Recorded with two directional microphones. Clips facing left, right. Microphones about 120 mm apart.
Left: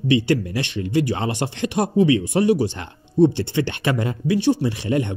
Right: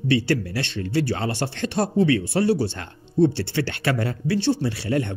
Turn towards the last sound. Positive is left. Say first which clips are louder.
# left 2 dB
turn(degrees=20)  # may be behind; listen again after turning